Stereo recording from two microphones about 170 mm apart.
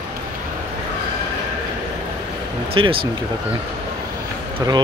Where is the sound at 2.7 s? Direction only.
30° right (ahead or behind).